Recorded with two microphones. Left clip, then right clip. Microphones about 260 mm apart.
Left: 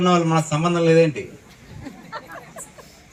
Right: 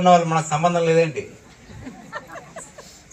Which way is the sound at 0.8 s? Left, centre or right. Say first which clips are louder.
Left 5 dB; left.